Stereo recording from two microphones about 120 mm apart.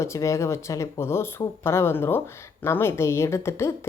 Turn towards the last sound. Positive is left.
turn(degrees=25)  # may be behind; listen again after turning